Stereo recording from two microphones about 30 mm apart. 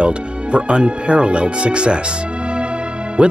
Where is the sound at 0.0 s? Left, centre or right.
Right.